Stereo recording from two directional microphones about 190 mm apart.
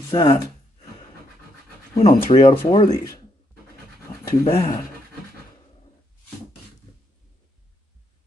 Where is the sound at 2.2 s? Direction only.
30° left (ahead or behind).